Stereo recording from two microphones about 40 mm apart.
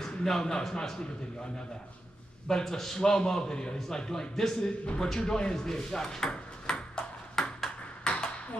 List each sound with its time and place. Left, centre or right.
0.0 s a man's voice: centre
7.4 s ping: centre
8.0 s ping: left